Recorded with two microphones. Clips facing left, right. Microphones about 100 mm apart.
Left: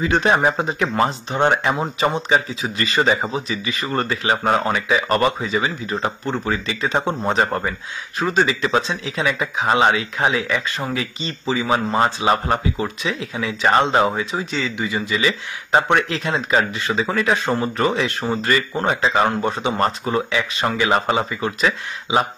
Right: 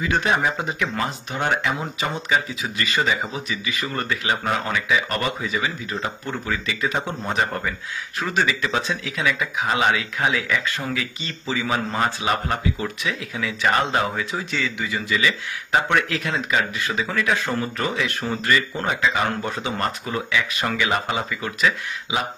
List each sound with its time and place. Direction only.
0.0 s speech: 35° left (ahead or behind)
8.2 s speech: 25° left (ahead or behind)